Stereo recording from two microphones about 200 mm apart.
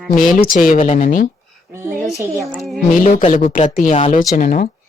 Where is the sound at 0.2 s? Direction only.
45° left (ahead or behind).